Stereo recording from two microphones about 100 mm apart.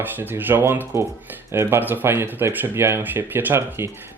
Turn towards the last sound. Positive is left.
turn(degrees=-20)  # may be behind; listen again after turning